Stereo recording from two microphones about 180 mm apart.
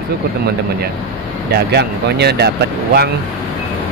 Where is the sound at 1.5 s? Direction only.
65° right (ahead or behind).